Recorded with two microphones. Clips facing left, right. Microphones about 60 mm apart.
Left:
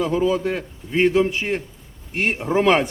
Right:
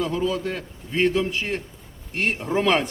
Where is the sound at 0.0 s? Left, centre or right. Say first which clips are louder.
Left 4 dB; centre.